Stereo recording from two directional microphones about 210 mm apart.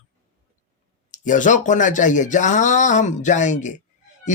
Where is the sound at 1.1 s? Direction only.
35° left (ahead or behind).